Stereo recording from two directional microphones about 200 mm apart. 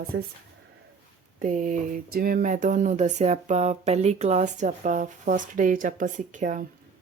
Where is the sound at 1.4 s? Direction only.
40° right (ahead or behind).